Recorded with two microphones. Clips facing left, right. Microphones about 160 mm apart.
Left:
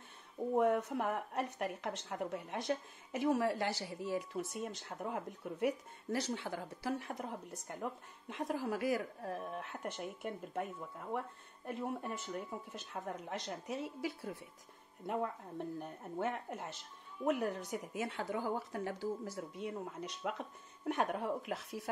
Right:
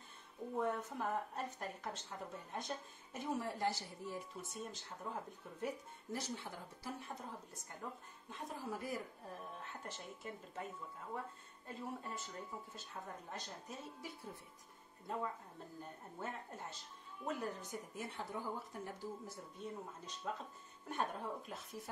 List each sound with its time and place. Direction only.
0.6 s speech: 75° left (ahead or behind)
12.7 s a woman's voice: 80° left
15.8 s a woman's voice: 85° left